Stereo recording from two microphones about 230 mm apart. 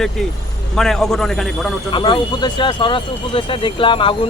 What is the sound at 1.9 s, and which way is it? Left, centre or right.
Speech, centre.